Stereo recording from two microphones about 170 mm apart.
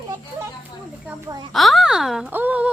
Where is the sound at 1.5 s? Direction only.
Centre (ahead or behind).